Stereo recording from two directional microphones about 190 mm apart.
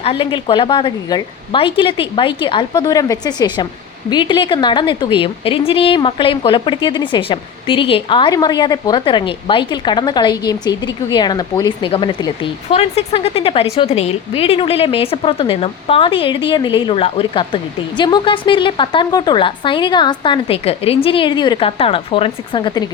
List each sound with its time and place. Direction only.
0.0 s a woman's voice: 30° left (ahead or behind)